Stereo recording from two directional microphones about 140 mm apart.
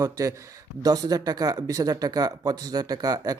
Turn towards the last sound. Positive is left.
turn(degrees=-25)  # may be behind; listen again after turning